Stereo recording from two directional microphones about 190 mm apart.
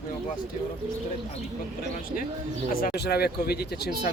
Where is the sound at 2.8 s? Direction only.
60° left (ahead or behind).